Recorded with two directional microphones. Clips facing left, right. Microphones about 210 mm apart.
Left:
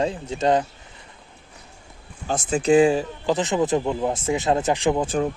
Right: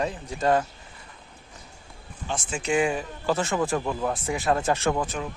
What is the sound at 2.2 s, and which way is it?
Speech, 40° left (ahead or behind).